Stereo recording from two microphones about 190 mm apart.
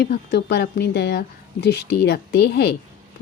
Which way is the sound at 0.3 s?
60° left (ahead or behind).